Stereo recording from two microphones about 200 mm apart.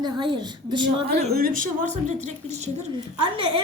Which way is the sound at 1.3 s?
45° right (ahead or behind).